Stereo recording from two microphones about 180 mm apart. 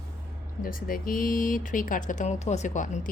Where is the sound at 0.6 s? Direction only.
50° left (ahead or behind).